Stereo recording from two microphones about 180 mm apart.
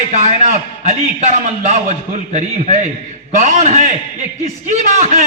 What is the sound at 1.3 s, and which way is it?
A man's voice, 40° right (ahead or behind).